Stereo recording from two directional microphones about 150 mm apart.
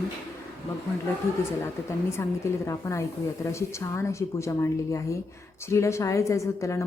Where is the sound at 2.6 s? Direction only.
20° left (ahead or behind).